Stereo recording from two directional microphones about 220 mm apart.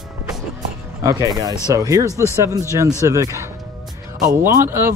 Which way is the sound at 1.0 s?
15° right (ahead or behind).